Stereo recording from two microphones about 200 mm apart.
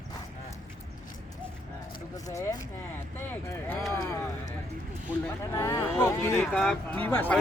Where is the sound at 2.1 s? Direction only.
15° left (ahead or behind).